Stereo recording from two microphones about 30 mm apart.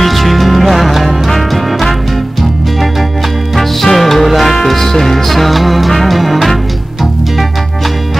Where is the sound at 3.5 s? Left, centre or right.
Centre.